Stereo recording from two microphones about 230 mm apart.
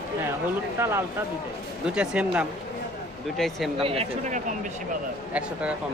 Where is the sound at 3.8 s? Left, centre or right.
Right.